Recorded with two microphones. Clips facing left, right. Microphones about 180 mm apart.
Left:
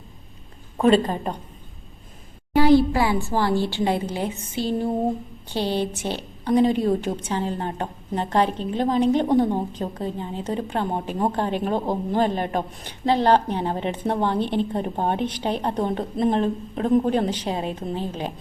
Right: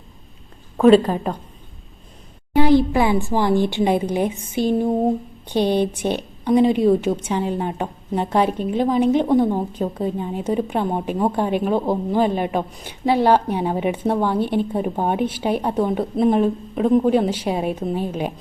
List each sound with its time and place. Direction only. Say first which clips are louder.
0.8 s a woman's voice: right 5 dB; centre (ahead or behind)
2.6 s a woman's voice: right 1 dB; 20° right (ahead or behind)